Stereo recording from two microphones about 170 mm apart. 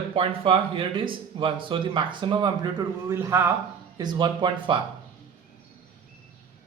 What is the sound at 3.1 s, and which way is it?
A man's voice, 15° right (ahead or behind).